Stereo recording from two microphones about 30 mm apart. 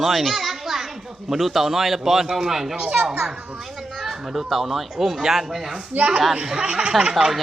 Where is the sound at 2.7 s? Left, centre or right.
Right.